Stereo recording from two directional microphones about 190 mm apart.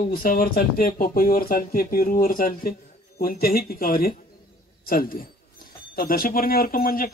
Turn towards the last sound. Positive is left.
turn(degrees=50)  # may be behind; listen again after turning